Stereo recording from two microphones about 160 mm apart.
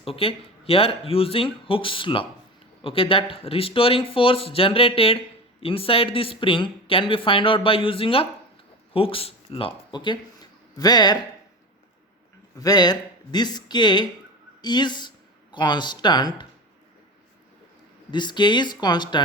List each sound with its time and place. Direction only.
0.0 s speech: 35° left (ahead or behind)
12.5 s speech: 25° left (ahead or behind)
18.1 s speech: 30° left (ahead or behind)